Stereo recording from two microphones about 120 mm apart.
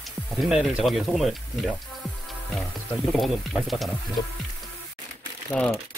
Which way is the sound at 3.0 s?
Centre (ahead or behind).